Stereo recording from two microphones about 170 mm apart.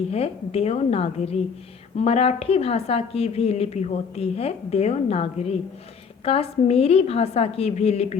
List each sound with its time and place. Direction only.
0.1 s a woman's voice: 35° left (ahead or behind)